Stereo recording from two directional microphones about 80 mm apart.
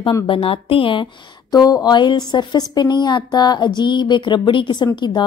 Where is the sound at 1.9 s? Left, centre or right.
Left.